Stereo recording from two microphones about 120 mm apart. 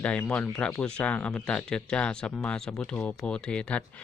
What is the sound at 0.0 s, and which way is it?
Speech, 10° left (ahead or behind).